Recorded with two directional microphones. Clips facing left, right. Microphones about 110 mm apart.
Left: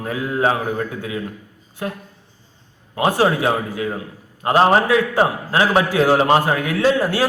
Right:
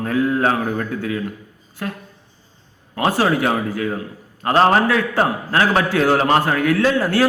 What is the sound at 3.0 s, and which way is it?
A man's voice, 15° left (ahead or behind).